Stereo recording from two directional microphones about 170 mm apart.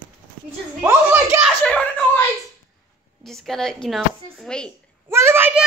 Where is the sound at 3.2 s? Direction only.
Centre (ahead or behind).